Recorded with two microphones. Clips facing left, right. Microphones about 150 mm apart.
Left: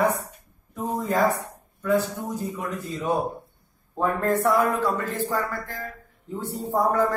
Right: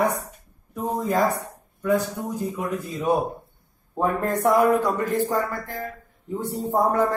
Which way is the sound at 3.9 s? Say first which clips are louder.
Even; 20° right (ahead or behind).